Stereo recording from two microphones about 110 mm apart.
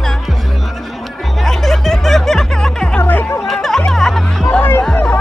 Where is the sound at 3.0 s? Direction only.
20° left (ahead or behind).